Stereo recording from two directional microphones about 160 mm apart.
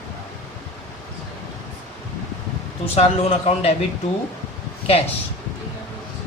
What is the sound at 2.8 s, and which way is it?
Speech, 40° left (ahead or behind).